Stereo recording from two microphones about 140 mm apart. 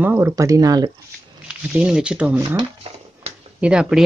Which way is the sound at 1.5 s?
10° right (ahead or behind).